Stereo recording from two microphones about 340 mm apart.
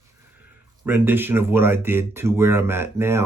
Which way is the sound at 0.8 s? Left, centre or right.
Centre.